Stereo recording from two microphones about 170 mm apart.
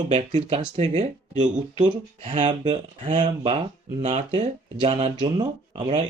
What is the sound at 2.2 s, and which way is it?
Speech, 40° right (ahead or behind).